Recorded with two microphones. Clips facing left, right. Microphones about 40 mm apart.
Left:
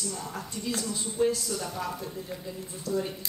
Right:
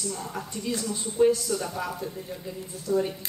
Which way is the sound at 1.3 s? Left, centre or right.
Right.